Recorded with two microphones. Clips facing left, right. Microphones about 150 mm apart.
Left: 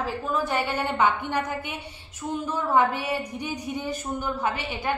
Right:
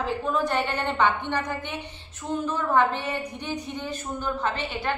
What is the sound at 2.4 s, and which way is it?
A woman's voice, 10° left (ahead or behind).